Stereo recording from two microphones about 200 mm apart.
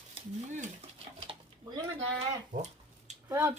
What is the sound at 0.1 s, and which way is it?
Stir, 35° right (ahead or behind).